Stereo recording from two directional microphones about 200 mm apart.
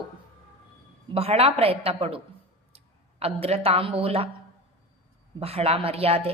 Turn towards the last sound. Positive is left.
turn(degrees=-30)  # may be behind; listen again after turning